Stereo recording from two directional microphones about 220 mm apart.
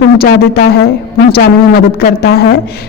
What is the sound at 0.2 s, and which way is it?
A woman's voice, 45° left (ahead or behind).